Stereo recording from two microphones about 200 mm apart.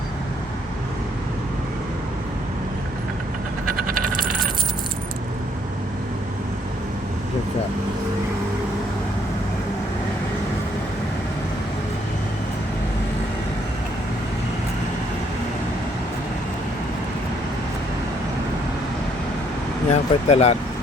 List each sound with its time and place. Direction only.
19.9 s speech: 35° left (ahead or behind)